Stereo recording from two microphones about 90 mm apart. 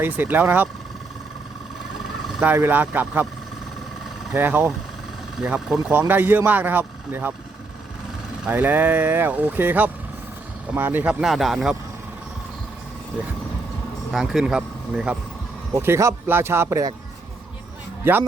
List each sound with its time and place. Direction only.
0.0 s speech: 20° right (ahead or behind)
2.4 s speech: 20° right (ahead or behind)
4.4 s speech: 20° right (ahead or behind)
5.5 s speech: 5° right (ahead or behind)
5.8 s speech: 25° right (ahead or behind)
8.4 s speech: 20° right (ahead or behind); by 11.8 s 5° right (ahead or behind)
14.1 s speech: 5° right (ahead or behind)
15.7 s speech: 30° right (ahead or behind)
18.0 s a man's voice: 25° right (ahead or behind)